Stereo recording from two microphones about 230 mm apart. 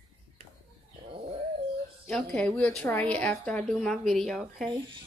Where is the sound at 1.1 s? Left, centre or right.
Right.